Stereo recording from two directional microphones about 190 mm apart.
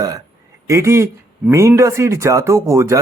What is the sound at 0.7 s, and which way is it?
A man's voice, 15° right (ahead or behind).